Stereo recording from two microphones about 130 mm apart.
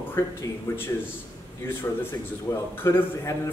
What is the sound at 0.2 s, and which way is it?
Speech, 20° left (ahead or behind).